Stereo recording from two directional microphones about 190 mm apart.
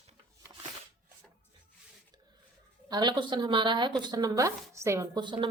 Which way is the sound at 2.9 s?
20° right (ahead or behind).